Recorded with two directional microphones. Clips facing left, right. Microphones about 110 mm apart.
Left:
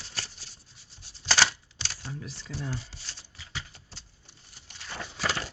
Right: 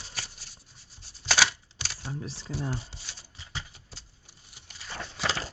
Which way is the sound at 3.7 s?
10° right (ahead or behind).